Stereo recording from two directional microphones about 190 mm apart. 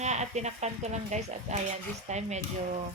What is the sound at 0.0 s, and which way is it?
Speech, 35° right (ahead or behind).